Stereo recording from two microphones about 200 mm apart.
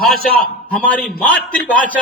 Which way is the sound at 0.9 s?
5° left (ahead or behind).